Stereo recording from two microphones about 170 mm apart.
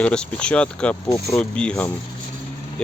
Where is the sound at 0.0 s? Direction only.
5° left (ahead or behind).